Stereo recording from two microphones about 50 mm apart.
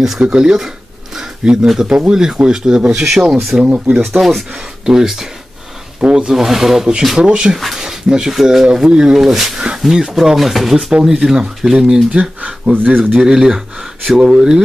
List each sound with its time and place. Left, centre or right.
0.4 s speech: centre
1.1 s a sound: centre
1.7 s speech: centre
10.9 s speech: centre
12.1 s speech: right
13.2 s speech: centre